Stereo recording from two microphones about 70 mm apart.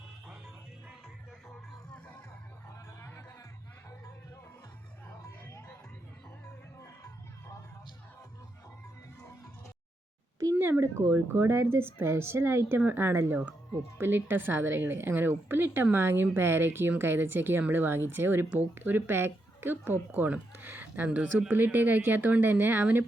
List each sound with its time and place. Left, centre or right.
5.5 s music: left
10.6 s a woman's voice: right